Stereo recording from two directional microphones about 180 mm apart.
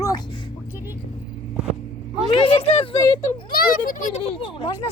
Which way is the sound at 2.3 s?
30° left (ahead or behind).